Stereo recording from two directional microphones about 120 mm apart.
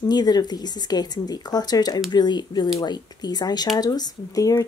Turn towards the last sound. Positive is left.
turn(degrees=30)  # may be behind; listen again after turning